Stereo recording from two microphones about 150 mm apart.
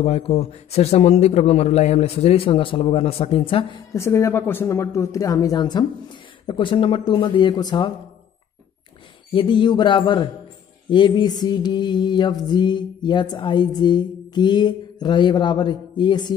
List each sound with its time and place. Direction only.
0.0 s a man's voice: 45° left (ahead or behind)
3.9 s mantra: 20° left (ahead or behind)
6.4 s speech: 35° left (ahead or behind)
9.3 s speech: 35° left (ahead or behind)
10.9 s mantra: 30° left (ahead or behind)